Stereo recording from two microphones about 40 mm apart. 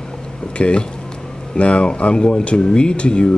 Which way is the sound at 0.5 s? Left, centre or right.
Left.